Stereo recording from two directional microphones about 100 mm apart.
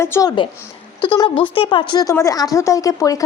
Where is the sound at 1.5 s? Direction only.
60° left (ahead or behind).